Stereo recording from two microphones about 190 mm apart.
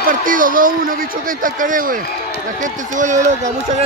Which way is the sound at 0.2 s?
45° right (ahead or behind).